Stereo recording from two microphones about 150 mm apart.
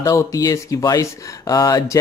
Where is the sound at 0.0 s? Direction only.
20° left (ahead or behind).